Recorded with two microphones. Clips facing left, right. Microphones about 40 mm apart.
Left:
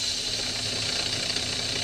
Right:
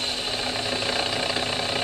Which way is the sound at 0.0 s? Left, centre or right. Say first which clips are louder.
Right 4 dB; right.